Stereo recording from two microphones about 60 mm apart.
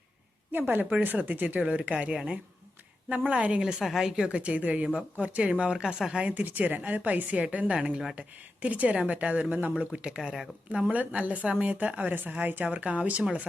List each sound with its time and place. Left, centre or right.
0.5 s a woman's voice: right
3.7 s a woman's voice: centre
5.7 s speech: centre
6.2 s a woman's voice: right
10.2 s speech: centre
10.7 s a woman's voice: centre